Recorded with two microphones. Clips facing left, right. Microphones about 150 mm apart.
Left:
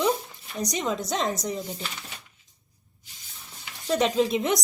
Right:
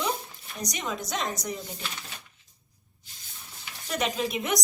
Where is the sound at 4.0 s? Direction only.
30° left (ahead or behind).